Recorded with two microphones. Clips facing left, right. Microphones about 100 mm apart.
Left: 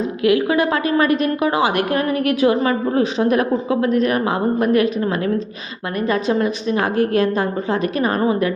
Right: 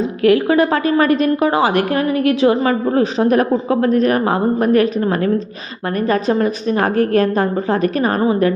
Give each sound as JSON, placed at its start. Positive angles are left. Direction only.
{"t": 0.3, "sound": "a woman's voice", "side_deg": -35}